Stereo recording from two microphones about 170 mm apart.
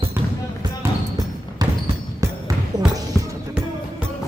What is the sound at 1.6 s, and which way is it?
Basketball bounce, 20° right (ahead or behind).